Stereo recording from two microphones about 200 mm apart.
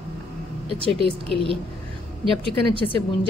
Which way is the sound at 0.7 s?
30° right (ahead or behind).